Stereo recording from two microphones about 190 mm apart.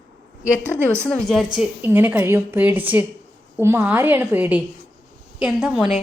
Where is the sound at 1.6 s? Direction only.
10° right (ahead or behind).